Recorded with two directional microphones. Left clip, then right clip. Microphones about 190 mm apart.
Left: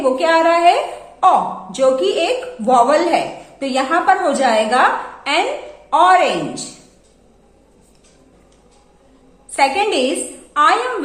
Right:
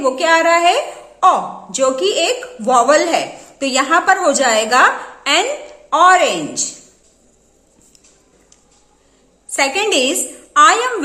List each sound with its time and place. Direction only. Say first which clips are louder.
0.0 s a woman's voice: even; 35° right (ahead or behind)
9.5 s a woman's voice: left 1 dB; 40° right (ahead or behind)